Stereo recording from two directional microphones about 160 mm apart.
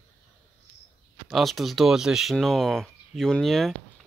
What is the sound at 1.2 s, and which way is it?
Speech, centre (ahead or behind).